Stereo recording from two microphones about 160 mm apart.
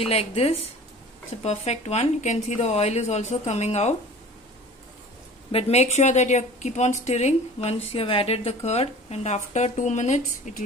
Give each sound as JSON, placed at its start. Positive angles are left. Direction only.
{"t": 0.0, "sound": "a woman's voice", "side_deg": 40}
{"t": 5.5, "sound": "speech", "side_deg": 40}